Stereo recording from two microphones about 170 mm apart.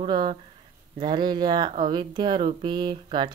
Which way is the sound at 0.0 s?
30° right (ahead or behind).